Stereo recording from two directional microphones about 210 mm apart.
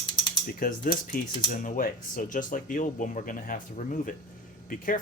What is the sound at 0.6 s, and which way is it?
Speech, 40° left (ahead or behind).